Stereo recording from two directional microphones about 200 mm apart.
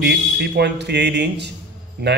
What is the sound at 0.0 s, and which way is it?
Speech, 55° right (ahead or behind).